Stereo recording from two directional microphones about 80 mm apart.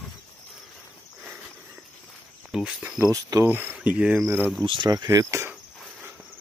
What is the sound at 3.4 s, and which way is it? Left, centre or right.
Speech, right.